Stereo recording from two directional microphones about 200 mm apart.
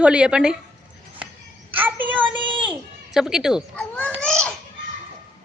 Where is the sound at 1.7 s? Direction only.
10° right (ahead or behind).